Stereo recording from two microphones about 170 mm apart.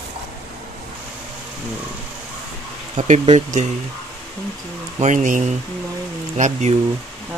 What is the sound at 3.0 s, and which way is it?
Speech, 45° right (ahead or behind).